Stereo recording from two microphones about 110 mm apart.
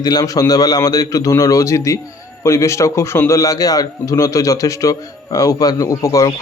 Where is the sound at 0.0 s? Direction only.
35° left (ahead or behind).